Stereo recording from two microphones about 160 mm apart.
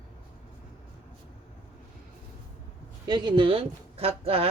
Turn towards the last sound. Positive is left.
turn(degrees=-40)  # may be behind; listen again after turning